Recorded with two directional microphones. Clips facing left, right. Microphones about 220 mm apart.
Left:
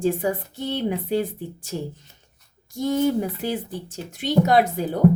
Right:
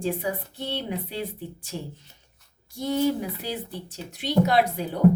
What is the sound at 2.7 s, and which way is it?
Speech, 45° left (ahead or behind).